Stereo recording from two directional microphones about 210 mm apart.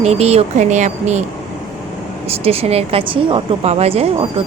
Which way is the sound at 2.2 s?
30° right (ahead or behind).